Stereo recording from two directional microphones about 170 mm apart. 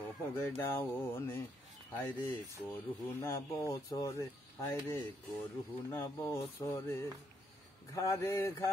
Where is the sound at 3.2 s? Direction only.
15° left (ahead or behind).